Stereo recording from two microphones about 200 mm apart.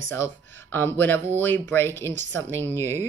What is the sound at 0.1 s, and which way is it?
Speech, 10° left (ahead or behind).